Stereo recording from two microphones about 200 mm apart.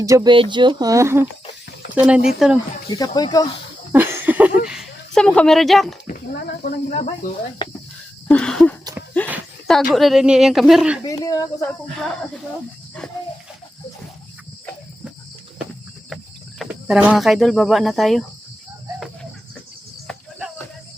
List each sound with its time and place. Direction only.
0.0 s speech: 15° right (ahead or behind)
3.2 s speech: 20° left (ahead or behind)
3.9 s a sound: 10° right (ahead or behind)
6.1 s speech: 45° left (ahead or behind)
7.6 s speech: 25° left (ahead or behind)
8.3 s speech: 5° left (ahead or behind)
8.8 s a sound: 20° right (ahead or behind)
9.6 s speech: centre (ahead or behind)
11.0 s speech: 20° left (ahead or behind)
11.9 s speech: centre (ahead or behind)
16.0 s speech: centre (ahead or behind)